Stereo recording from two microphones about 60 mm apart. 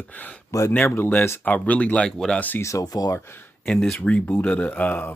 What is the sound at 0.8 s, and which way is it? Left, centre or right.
Speech, left.